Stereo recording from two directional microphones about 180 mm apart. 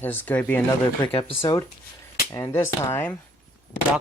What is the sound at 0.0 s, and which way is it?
Speech, 10° left (ahead or behind).